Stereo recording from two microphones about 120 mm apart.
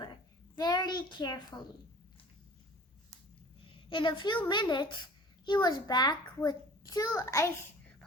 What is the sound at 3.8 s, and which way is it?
A child's voice, 40° left (ahead or behind).